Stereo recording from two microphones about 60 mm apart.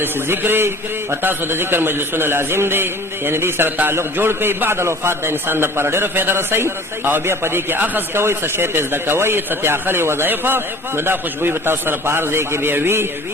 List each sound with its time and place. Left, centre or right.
0.0 s a man's voice: right